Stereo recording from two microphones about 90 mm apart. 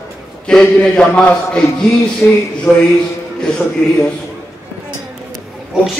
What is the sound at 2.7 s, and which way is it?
Speech, 35° left (ahead or behind).